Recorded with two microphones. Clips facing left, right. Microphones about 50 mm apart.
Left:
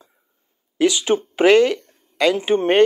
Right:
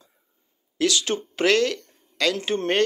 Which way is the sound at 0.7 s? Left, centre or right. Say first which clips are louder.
Left 6 dB; centre.